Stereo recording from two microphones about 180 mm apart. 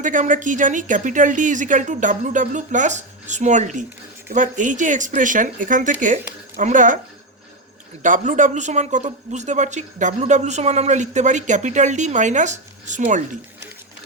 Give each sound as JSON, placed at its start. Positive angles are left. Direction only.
{"t": 0.0, "sound": "a woman's voice", "side_deg": -45}
{"t": 8.0, "sound": "a man's voice", "side_deg": -45}